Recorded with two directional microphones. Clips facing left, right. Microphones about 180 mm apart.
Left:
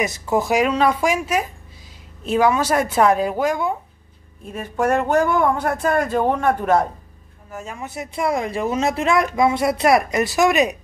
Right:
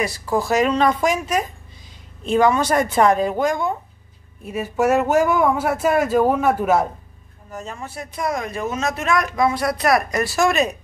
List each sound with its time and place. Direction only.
0.0 s a woman's voice: 20° left (ahead or behind)
4.5 s speech: 5° right (ahead or behind)
7.5 s speech: 10° left (ahead or behind)